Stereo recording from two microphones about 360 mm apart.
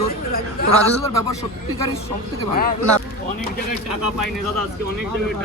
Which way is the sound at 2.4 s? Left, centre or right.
Left.